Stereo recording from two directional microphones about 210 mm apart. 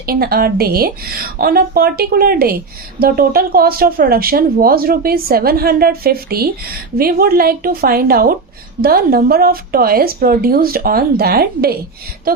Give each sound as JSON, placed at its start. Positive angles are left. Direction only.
{"t": 0.0, "sound": "speech", "side_deg": -45}